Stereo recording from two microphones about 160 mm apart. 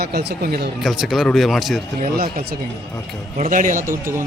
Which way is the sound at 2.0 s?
65° right (ahead or behind).